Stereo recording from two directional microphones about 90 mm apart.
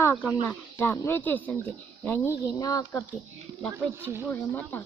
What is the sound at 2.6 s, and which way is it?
Speech, 40° left (ahead or behind).